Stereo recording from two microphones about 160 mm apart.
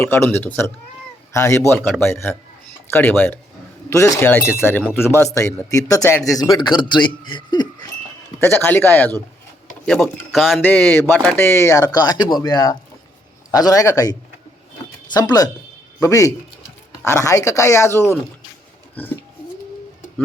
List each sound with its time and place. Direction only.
0.0 s speech: 15° left (ahead or behind)
8.4 s speech: 10° left (ahead or behind)
10.6 s speech: 10° left (ahead or behind)